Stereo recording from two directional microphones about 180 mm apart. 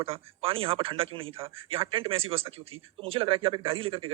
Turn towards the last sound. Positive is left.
turn(degrees=-30)  # may be behind; listen again after turning